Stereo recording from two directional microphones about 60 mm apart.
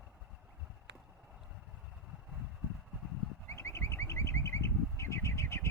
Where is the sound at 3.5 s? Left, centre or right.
Left.